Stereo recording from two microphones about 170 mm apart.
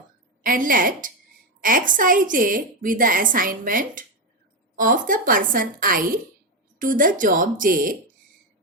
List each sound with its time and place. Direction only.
0.4 s a woman's voice: 55° right (ahead or behind)